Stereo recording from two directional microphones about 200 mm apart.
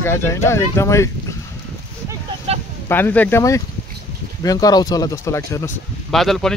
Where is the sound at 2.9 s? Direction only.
10° left (ahead or behind).